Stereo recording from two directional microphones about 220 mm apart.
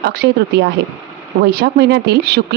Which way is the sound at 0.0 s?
50° right (ahead or behind).